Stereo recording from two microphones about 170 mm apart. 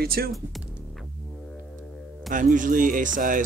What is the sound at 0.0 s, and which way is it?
Speech, 60° right (ahead or behind).